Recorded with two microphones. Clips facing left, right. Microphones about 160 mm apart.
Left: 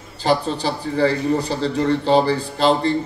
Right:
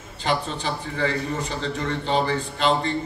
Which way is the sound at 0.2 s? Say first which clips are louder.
Left 6 dB; 35° left (ahead or behind).